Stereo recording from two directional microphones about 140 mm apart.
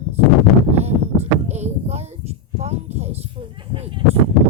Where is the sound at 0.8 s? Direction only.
50° right (ahead or behind); by 4.0 s 35° right (ahead or behind).